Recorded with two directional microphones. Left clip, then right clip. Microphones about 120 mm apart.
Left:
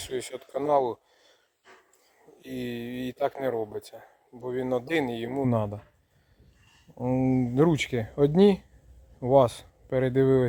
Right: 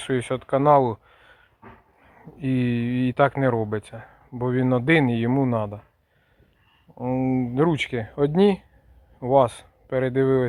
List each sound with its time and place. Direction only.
0.1 s speech: 25° left (ahead or behind)
2.4 s speech: 25° left (ahead or behind)
7.0 s speech: 20° left (ahead or behind)